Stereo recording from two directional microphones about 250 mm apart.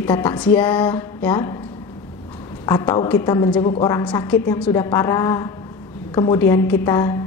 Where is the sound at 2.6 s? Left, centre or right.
Centre.